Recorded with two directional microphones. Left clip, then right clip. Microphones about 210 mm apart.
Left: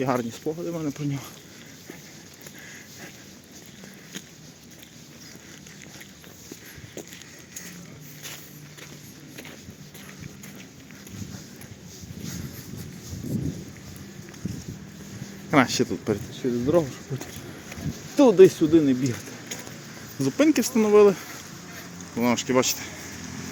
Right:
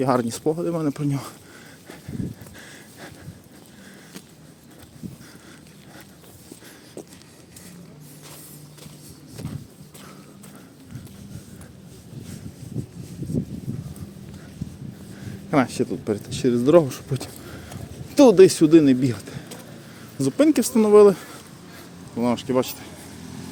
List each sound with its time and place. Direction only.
0.0 s speech: 25° right (ahead or behind)
0.3 s speech: 40° right (ahead or behind)
15.4 s a sound: 5° right (ahead or behind)
16.3 s speech: 35° right (ahead or behind)
18.2 s speech: 25° right (ahead or behind)
20.1 s speech: 15° right (ahead or behind)
22.1 s speech: 10° right (ahead or behind)